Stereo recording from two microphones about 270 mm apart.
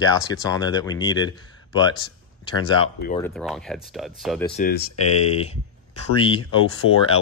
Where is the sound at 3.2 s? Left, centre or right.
Centre.